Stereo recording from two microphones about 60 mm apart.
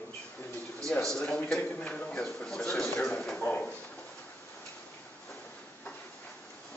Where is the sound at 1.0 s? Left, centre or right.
Centre.